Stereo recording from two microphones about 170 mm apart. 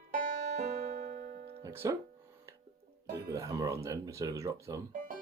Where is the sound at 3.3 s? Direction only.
20° right (ahead or behind).